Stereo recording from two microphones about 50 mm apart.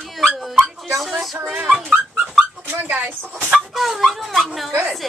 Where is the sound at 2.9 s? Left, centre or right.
Right.